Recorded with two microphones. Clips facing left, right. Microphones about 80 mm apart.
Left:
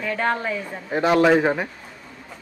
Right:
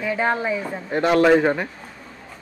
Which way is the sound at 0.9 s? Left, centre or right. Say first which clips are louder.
Right 1 dB; centre.